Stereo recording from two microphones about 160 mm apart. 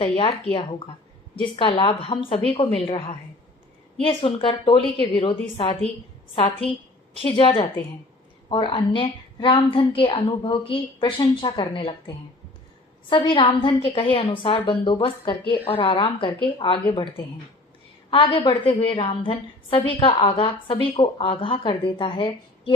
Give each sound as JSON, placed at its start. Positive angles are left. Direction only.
{"t": 0.0, "sound": "a woman's voice", "side_deg": 35}
{"t": 1.4, "sound": "a woman's voice", "side_deg": 30}